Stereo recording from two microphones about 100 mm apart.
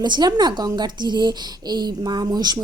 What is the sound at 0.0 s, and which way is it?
Speech, 45° right (ahead or behind).